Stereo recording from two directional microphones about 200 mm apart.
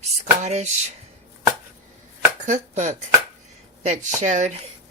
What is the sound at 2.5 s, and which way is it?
Speech, 35° right (ahead or behind).